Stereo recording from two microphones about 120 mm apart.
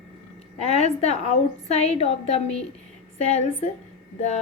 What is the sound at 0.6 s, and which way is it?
A woman's voice, 65° left (ahead or behind).